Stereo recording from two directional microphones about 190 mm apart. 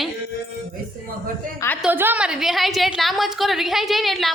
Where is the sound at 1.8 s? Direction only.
10° right (ahead or behind).